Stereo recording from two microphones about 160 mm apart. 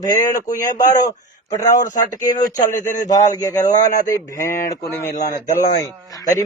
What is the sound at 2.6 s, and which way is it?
Speech, 50° left (ahead or behind).